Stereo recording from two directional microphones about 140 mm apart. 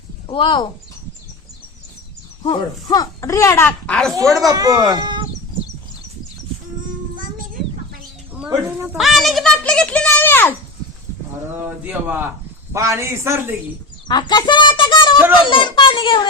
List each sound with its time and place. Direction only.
0.3 s a child's voice: 35° left (ahead or behind)
2.4 s speech: 30° left (ahead or behind); by 4.1 s 5° left (ahead or behind)
4.4 s speech: 25° right (ahead or behind)
9.0 s a sound: centre (ahead or behind); by 10.5 s 15° left (ahead or behind)
11.6 s a man's voice: 15° right (ahead or behind)
14.1 s a child's voice: 30° left (ahead or behind)